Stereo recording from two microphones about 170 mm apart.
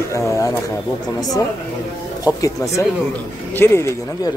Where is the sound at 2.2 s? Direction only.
20° left (ahead or behind).